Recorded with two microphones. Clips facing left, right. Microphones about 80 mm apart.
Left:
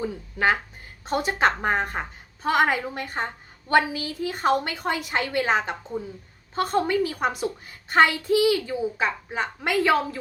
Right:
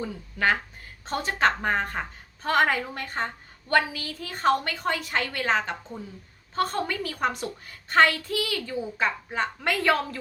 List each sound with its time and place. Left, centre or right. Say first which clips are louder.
0.0 s a woman's voice: left 2 dB; centre